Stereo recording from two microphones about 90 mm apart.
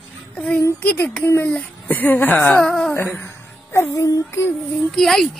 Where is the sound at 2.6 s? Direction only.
5° left (ahead or behind).